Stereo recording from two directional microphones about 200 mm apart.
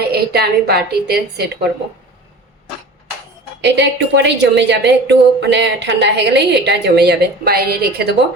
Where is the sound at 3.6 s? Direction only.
60° right (ahead or behind).